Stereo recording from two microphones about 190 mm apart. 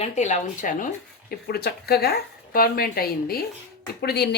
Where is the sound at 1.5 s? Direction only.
55° left (ahead or behind).